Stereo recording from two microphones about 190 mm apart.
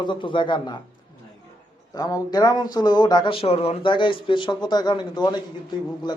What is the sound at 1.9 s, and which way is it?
Speech, 20° left (ahead or behind).